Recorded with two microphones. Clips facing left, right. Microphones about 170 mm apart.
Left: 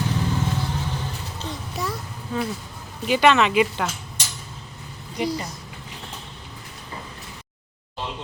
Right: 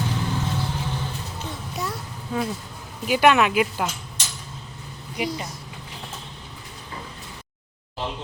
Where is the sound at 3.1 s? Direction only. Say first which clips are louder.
Even; 10° right (ahead or behind).